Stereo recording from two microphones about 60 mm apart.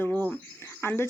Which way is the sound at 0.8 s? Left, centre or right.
Left.